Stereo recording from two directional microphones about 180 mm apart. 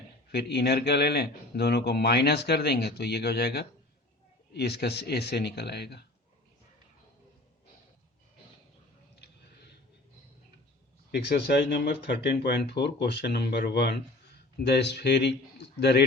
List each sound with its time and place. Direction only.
0.3 s speech: 65° left (ahead or behind)
11.1 s speech: 65° left (ahead or behind)